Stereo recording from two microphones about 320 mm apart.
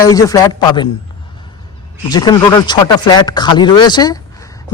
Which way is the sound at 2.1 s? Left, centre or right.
Centre.